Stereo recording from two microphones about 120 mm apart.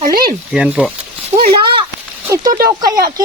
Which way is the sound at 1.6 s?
45° right (ahead or behind).